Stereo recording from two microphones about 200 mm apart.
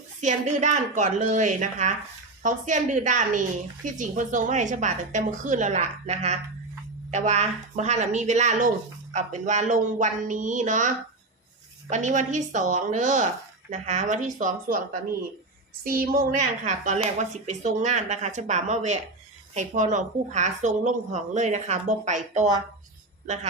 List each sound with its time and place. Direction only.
0.2 s a woman's voice: 35° right (ahead or behind)
15.8 s a woman's voice: 45° right (ahead or behind)